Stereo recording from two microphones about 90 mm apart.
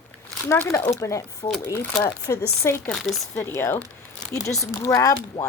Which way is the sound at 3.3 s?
30° left (ahead or behind).